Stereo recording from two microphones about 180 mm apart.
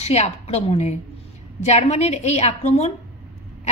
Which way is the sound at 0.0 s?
35° left (ahead or behind).